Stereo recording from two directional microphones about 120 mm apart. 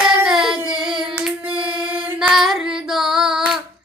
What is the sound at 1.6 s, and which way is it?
Female singing, 10° right (ahead or behind).